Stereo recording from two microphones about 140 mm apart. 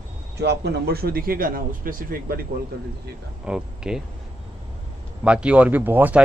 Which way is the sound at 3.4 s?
5° right (ahead or behind).